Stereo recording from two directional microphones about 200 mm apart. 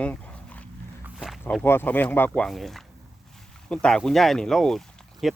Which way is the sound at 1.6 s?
10° left (ahead or behind).